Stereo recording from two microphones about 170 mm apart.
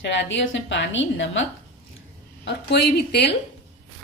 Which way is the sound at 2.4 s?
75° left (ahead or behind).